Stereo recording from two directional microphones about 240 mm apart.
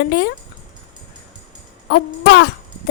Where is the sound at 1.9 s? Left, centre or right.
Left.